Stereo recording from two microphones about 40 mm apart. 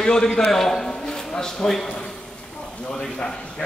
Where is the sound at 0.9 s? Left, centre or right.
Centre.